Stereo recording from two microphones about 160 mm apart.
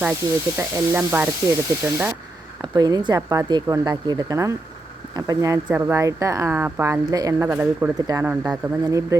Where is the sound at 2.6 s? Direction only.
25° right (ahead or behind).